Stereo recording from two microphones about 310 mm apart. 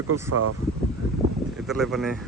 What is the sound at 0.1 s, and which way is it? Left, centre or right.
Speech, right.